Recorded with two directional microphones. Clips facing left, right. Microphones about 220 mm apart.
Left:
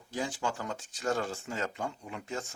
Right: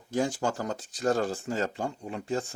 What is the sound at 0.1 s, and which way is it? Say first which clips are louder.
Speech: right 6 dB; 45° right (ahead or behind).